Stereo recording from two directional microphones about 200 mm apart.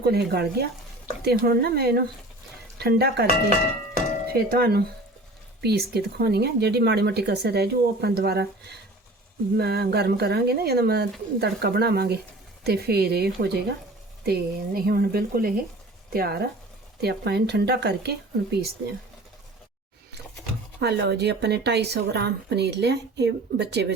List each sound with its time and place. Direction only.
0.0 s speech: 55° right (ahead or behind)
4.3 s a woman's voice: 50° right (ahead or behind)
9.6 s a woman's voice: 55° right (ahead or behind)
20.7 s a woman's voice: 60° right (ahead or behind)